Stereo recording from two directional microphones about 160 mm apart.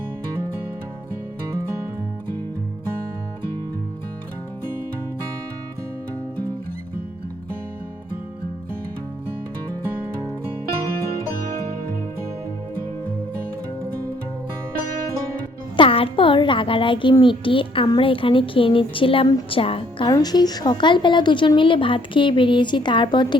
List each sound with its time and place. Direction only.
15.7 s a woman's voice: 35° left (ahead or behind)
20.1 s speech: 25° left (ahead or behind)